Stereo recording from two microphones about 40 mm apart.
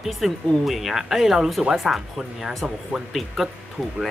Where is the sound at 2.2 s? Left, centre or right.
Centre.